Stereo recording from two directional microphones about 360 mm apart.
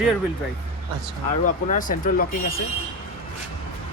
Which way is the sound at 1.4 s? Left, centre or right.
Left.